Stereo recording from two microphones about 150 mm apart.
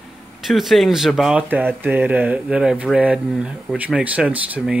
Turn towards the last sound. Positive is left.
turn(degrees=-10)  # may be behind; listen again after turning